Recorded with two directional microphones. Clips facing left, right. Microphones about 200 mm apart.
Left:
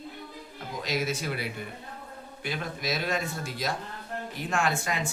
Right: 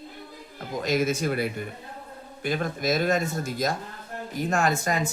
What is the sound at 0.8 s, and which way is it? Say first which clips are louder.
Speech: right 6 dB; 50° right (ahead or behind).